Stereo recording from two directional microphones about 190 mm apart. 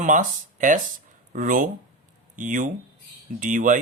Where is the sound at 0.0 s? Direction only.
45° right (ahead or behind).